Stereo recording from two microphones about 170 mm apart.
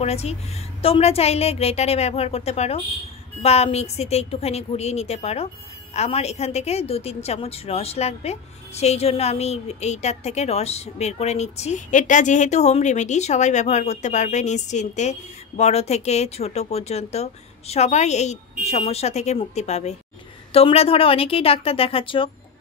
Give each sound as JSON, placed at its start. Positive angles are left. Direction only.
{"t": 0.0, "sound": "a woman's voice", "side_deg": 40}